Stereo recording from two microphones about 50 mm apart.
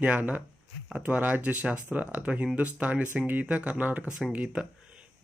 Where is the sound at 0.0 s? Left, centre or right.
Right.